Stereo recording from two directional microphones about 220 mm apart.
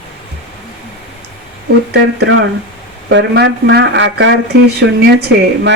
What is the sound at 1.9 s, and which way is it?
Speech, 50° right (ahead or behind).